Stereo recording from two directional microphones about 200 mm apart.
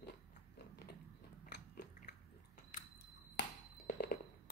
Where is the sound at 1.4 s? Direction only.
55° left (ahead or behind).